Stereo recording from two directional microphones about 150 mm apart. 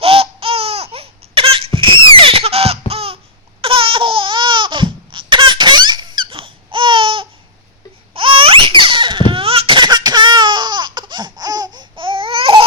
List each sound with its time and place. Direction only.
0.0 s laughter: 40° right (ahead or behind)
3.6 s crying: 35° right (ahead or behind)
8.1 s laughter: 35° right (ahead or behind)